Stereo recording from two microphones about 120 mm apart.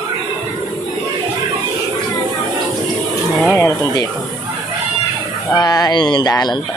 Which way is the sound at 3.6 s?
25° left (ahead or behind).